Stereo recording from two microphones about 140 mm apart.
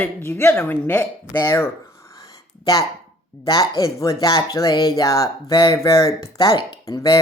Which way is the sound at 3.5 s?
25° left (ahead or behind).